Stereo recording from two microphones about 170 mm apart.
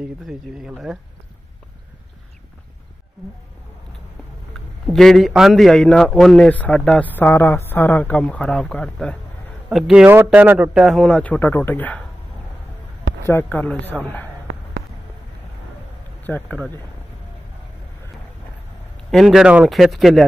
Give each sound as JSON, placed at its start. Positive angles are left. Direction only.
{"t": 0.0, "sound": "a man's voice", "side_deg": -5}
{"t": 4.6, "sound": "a man's voice", "side_deg": 0}
{"t": 13.3, "sound": "a man's voice", "side_deg": 10}
{"t": 14.5, "sound": "a sound", "side_deg": -90}
{"t": 16.3, "sound": "a man's voice", "side_deg": 10}
{"t": 19.0, "sound": "a man's voice", "side_deg": 0}